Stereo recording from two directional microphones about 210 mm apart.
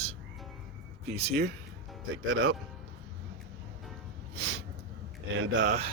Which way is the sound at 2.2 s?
70° right (ahead or behind).